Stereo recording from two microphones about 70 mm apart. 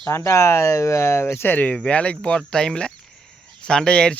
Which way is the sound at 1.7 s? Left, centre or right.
Centre.